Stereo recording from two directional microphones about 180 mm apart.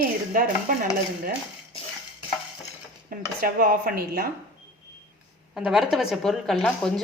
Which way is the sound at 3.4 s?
55° right (ahead or behind).